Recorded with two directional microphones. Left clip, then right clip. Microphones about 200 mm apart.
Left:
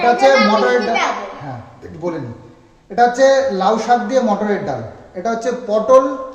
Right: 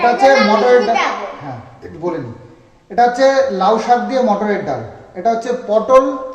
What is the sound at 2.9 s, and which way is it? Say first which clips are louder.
A man's voice: even; 20° left (ahead or behind).